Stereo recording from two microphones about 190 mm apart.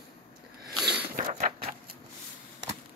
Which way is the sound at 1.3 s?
40° right (ahead or behind).